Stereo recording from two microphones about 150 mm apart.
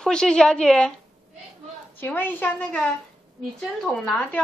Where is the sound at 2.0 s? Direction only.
15° left (ahead or behind).